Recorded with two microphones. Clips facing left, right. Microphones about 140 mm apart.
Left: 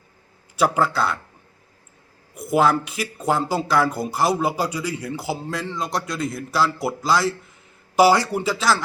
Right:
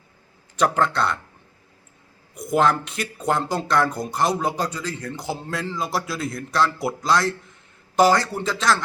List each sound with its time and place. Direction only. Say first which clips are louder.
0.5 s speech: left 1 dB; 5° left (ahead or behind)
2.3 s speech: left 1 dB; 5° left (ahead or behind)